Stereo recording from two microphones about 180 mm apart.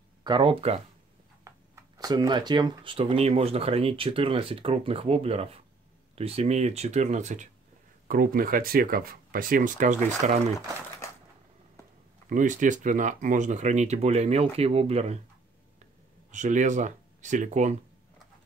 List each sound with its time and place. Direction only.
0.2 s speech: 25° right (ahead or behind)
1.5 s a sound: 15° right (ahead or behind)
2.0 s speech: 20° right (ahead or behind); by 7.4 s 40° right (ahead or behind)
8.1 s speech: 55° right (ahead or behind)
12.3 s speech: 45° right (ahead or behind)
16.3 s speech: 40° right (ahead or behind)